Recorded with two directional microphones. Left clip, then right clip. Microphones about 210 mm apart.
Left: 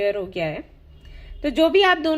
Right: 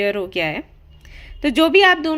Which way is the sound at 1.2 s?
40° right (ahead or behind).